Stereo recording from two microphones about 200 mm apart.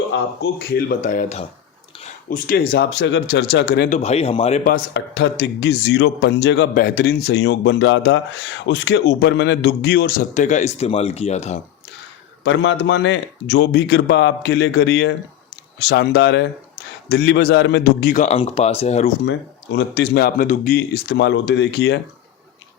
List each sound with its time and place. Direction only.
0.1 s speech: 55° left (ahead or behind)
3.9 s speech: 30° left (ahead or behind)
4.7 s speech: 60° left (ahead or behind); by 11.6 s 35° left (ahead or behind)
12.5 s speech: 65° left (ahead or behind)
18.1 s speech: 35° left (ahead or behind)
19.2 s speech: 65° left (ahead or behind); by 20.7 s 45° left (ahead or behind)
20.7 s speech: 55° left (ahead or behind)